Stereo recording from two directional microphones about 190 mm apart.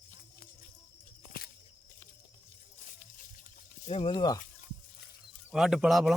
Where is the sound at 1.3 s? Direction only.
50° left (ahead or behind).